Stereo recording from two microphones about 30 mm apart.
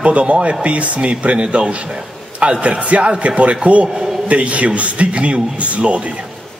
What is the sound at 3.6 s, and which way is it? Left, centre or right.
A man's voice, right.